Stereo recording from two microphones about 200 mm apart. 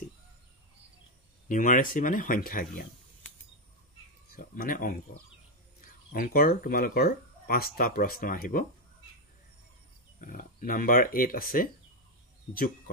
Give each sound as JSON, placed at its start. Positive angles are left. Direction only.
{"t": 1.5, "sound": "speech", "side_deg": 40}
{"t": 4.4, "sound": "speech", "side_deg": 45}
{"t": 5.8, "sound": "a sound", "side_deg": 45}
{"t": 6.5, "sound": "speech", "side_deg": 45}
{"t": 10.2, "sound": "speech", "side_deg": 45}